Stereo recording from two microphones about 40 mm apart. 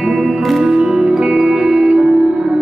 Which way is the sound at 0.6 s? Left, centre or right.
Centre.